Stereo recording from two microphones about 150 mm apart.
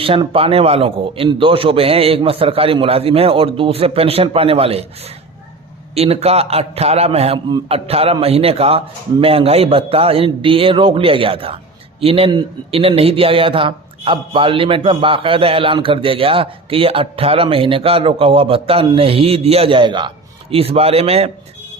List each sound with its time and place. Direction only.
0.0 s a man's voice: 40° right (ahead or behind)